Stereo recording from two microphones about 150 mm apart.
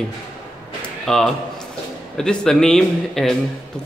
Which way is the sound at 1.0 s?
5° left (ahead or behind).